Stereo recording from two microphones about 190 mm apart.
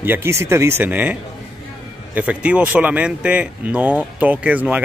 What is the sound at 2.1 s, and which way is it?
Speech, 5° right (ahead or behind).